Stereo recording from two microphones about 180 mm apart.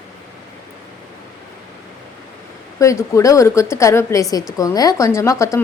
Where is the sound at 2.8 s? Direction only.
15° left (ahead or behind).